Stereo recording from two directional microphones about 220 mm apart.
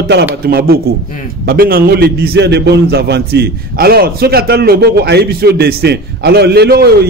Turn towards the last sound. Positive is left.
turn(degrees=-45)  # may be behind; listen again after turning